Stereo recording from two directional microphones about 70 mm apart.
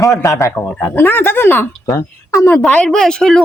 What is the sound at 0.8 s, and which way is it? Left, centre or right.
Speech, left.